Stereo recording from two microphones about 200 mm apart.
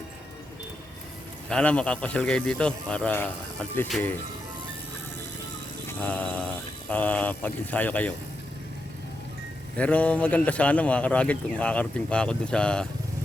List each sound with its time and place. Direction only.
1.5 s a man's voice: 5° left (ahead or behind)
6.0 s speech: 5° left (ahead or behind)
9.7 s speech: 5° left (ahead or behind)